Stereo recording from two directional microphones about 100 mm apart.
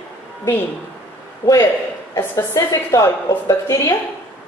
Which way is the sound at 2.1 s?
30° left (ahead or behind).